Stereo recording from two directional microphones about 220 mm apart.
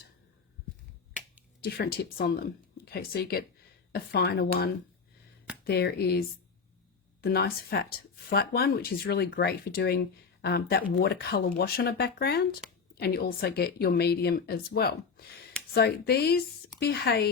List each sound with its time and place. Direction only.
1.6 s speech: 50° left (ahead or behind)